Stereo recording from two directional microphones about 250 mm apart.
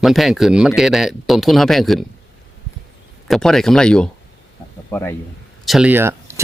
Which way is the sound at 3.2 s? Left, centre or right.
Centre.